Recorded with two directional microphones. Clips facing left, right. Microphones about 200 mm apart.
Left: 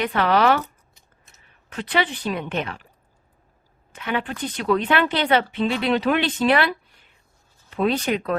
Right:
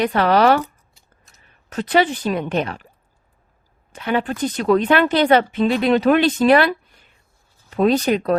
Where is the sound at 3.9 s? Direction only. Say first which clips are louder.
Right 5 dB; 40° right (ahead or behind).